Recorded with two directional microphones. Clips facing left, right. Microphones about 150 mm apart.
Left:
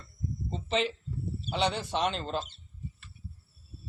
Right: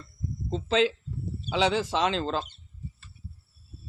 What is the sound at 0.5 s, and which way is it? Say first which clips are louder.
Speech: right 6 dB; 90° right.